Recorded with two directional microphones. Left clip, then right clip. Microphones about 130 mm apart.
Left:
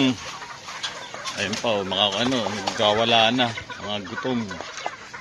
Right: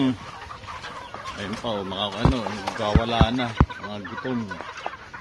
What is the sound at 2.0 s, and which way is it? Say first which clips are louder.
Speech: left 3 dB; 15° left (ahead or behind).